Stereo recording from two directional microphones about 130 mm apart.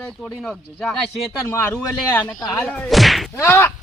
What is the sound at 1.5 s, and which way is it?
Speech, 15° left (ahead or behind).